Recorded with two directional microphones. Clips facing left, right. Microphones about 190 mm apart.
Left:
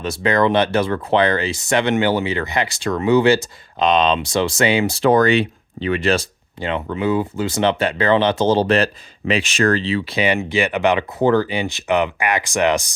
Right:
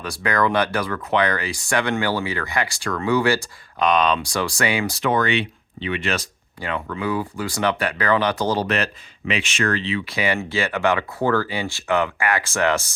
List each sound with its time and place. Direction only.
0.0 s speech: 25° left (ahead or behind)
5.1 s speech: 40° left (ahead or behind)
10.2 s speech: 20° left (ahead or behind)